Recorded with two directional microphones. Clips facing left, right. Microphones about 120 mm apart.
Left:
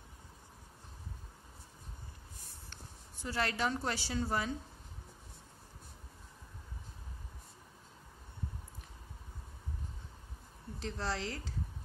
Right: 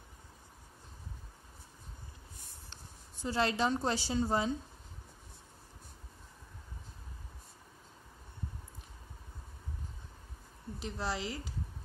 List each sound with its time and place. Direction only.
2.7 s a woman's voice: 20° right (ahead or behind)
10.8 s speech: 15° right (ahead or behind)